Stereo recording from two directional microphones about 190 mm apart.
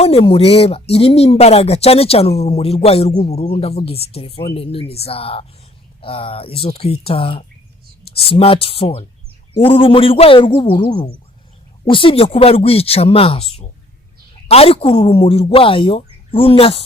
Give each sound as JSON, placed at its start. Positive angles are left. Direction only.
{"t": 0.0, "sound": "speech", "side_deg": 30}